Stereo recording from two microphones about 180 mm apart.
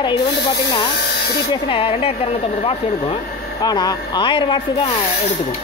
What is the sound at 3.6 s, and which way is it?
Speech, 20° left (ahead or behind).